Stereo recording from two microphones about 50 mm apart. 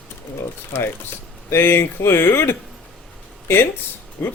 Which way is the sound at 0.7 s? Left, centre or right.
Left.